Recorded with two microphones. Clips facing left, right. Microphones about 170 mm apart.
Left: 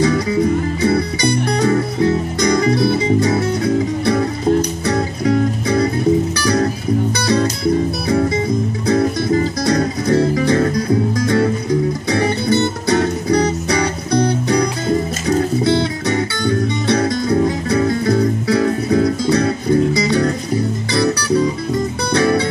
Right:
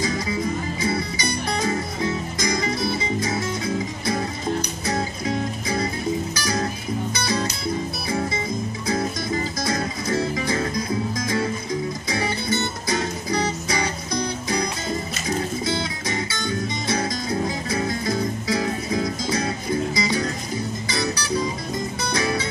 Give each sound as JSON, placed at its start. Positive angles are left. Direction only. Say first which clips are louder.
{"t": 0.0, "sound": "music", "louder": "left 9 dB", "side_deg": 65}
{"t": 8.8, "sound": "music", "louder": "left 9 dB", "side_deg": 60}
{"t": 10.1, "sound": "music", "louder": "left 9 dB", "side_deg": 40}
{"t": 10.4, "sound": "music", "louder": "left 9 dB", "side_deg": 65}